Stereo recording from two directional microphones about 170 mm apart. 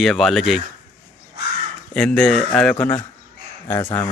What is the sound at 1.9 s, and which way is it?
A man's voice, 5° left (ahead or behind).